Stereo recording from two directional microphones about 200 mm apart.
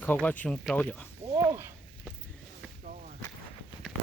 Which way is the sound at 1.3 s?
15° right (ahead or behind).